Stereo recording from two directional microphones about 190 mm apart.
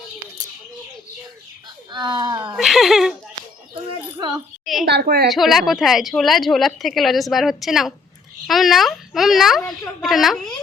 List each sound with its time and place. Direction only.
1.9 s speech: 20° right (ahead or behind)
2.6 s speech: centre (ahead or behind)
4.6 s a sound: centre (ahead or behind)
4.9 s a woman's voice: 60° right (ahead or behind)
5.3 s a woman's voice: centre (ahead or behind)